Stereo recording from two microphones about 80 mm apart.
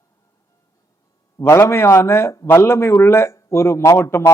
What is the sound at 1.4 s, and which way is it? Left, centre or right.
Speech, left.